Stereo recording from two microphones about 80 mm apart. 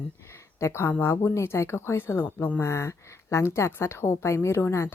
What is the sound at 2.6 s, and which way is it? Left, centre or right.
A woman's voice, left.